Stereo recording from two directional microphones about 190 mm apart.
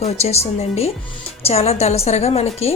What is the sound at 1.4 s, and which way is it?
A woman's voice, 35° left (ahead or behind).